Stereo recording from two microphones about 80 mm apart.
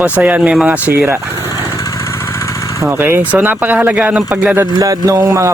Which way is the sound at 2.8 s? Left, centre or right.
Right.